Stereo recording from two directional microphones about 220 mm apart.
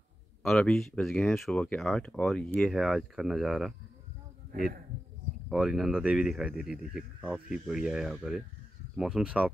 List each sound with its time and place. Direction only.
0.4 s speech: centre (ahead or behind)
4.5 s speech: 40° right (ahead or behind)
5.5 s speech: centre (ahead or behind)